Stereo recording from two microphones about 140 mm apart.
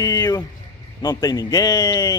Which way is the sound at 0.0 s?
25° left (ahead or behind).